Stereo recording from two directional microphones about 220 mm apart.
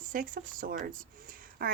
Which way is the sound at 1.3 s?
40° right (ahead or behind).